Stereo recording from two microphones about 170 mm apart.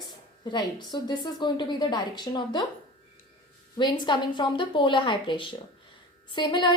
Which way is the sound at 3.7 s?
25° left (ahead or behind).